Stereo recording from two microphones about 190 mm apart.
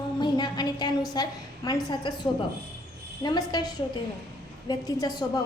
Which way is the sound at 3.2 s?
20° left (ahead or behind).